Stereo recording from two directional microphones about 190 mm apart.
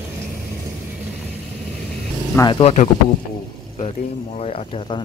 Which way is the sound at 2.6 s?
40° left (ahead or behind).